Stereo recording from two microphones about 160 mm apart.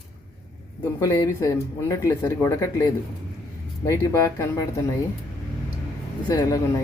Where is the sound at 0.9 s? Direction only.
20° left (ahead or behind).